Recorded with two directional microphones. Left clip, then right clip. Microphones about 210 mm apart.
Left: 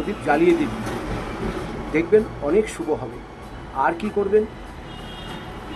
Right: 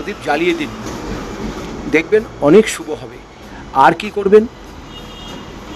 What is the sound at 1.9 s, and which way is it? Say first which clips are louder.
Speech: right 4 dB; 50° right (ahead or behind).